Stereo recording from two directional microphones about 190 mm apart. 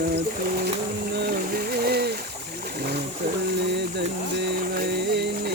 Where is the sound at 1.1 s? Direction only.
55° right (ahead or behind).